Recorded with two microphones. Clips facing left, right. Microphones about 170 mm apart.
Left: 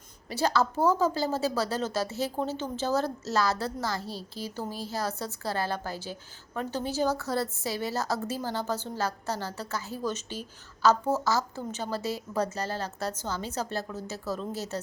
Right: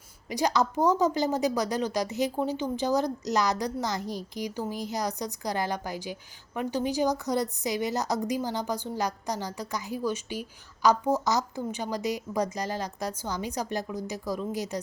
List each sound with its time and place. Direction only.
0.3 s a woman's voice: 15° right (ahead or behind)